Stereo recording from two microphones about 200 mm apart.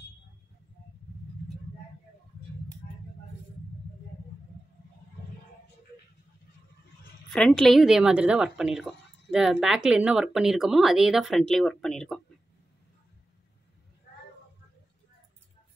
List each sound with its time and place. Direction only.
2.8 s vehicle: 40° left (ahead or behind)
7.3 s a woman's voice: 5° left (ahead or behind)